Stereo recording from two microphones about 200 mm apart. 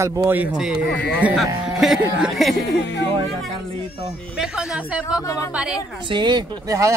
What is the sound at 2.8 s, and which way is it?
Speech, 60° left (ahead or behind).